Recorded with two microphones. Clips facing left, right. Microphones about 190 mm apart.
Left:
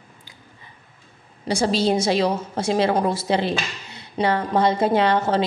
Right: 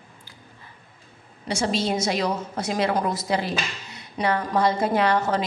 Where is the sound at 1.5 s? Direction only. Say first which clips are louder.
Left 4 dB; 35° left (ahead or behind).